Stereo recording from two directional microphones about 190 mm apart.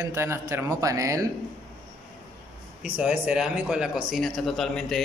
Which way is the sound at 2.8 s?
5° right (ahead or behind).